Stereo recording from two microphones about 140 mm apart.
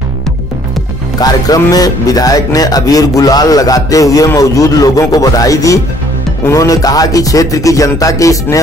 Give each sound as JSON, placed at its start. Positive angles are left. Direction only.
{"t": 1.2, "sound": "speech", "side_deg": 25}